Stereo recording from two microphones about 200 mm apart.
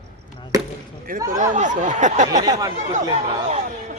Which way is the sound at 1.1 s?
40° right (ahead or behind).